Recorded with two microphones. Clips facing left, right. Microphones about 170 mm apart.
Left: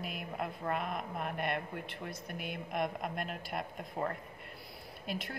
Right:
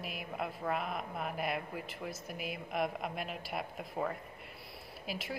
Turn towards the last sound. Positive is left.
turn(degrees=-5)  # may be behind; listen again after turning